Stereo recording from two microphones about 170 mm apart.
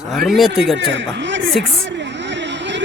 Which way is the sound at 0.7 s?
90° right.